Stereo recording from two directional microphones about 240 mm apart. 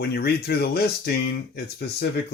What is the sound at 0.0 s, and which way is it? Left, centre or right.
Speech, left.